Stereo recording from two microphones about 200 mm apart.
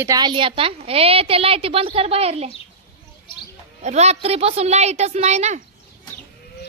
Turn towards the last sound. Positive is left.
turn(degrees=-35)  # may be behind; listen again after turning